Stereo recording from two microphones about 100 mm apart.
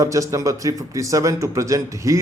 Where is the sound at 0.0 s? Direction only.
35° right (ahead or behind).